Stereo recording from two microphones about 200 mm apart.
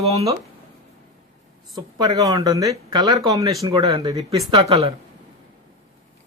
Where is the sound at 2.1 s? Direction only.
20° right (ahead or behind).